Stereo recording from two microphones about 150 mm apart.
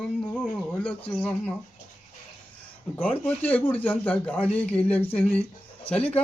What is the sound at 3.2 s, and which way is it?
Speech, 10° left (ahead or behind).